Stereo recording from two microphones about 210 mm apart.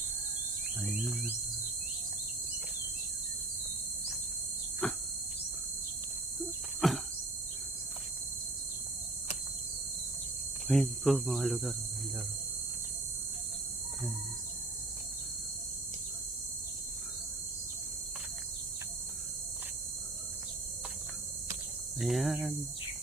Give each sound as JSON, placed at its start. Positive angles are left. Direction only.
{"t": 4.8, "sound": "cricket", "side_deg": 5}
{"t": 6.8, "sound": "cricket", "side_deg": 0}
{"t": 10.7, "sound": "cricket", "side_deg": 0}
{"t": 22.0, "sound": "cricket", "side_deg": 0}